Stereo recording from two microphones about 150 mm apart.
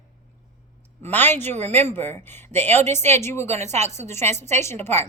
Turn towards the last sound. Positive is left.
turn(degrees=15)  # may be behind; listen again after turning